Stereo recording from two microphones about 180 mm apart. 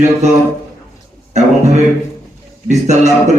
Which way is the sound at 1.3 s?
40° right (ahead or behind).